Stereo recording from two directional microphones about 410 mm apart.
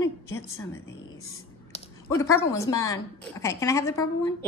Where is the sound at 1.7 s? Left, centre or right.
Centre.